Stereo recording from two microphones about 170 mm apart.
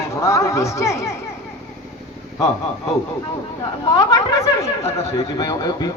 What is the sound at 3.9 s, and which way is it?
A man's voice, 25° left (ahead or behind).